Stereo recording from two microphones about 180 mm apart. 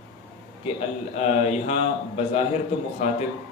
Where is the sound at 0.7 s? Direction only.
35° left (ahead or behind).